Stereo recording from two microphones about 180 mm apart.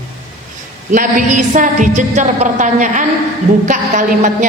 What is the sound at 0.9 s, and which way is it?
A woman's voice, 45° right (ahead or behind).